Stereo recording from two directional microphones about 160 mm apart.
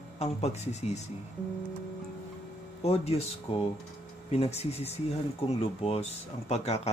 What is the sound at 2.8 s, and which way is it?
Speech, 40° left (ahead or behind).